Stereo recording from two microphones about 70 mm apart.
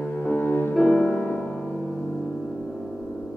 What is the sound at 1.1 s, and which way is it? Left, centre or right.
Music, left.